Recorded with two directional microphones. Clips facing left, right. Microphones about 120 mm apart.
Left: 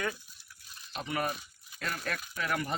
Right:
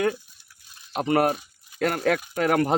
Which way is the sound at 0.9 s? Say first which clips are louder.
Right 12 dB; 75° right (ahead or behind).